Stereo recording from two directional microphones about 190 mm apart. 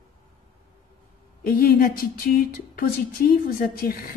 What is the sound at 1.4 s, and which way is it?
Speech, 50° left (ahead or behind).